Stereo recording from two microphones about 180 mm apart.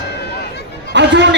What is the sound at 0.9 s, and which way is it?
Speech, 75° right (ahead or behind).